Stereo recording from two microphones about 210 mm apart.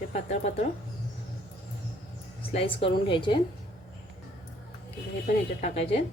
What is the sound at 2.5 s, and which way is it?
Speech, 25° left (ahead or behind).